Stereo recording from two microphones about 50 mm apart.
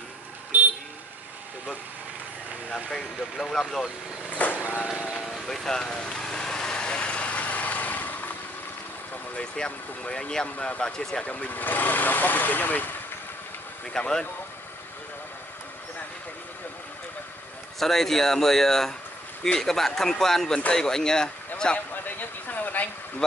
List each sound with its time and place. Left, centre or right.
0.5 s vehicle: right
2.7 s speech: centre
4.3 s vehicle: left
5.3 s speech: centre
6.2 s vehicle: centre; by 8.3 s left
9.4 s speech: left
11.3 s speech: left
13.9 s speech: centre
17.7 s speech: centre
21.7 s a sound: left